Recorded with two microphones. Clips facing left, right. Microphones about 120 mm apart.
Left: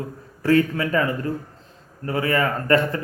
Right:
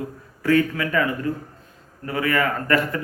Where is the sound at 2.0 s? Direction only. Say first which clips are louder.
Left 1 dB; 30° left (ahead or behind).